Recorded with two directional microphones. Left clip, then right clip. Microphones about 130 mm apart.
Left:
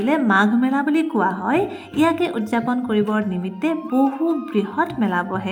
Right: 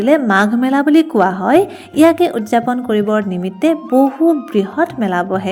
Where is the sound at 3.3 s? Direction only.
40° right (ahead or behind).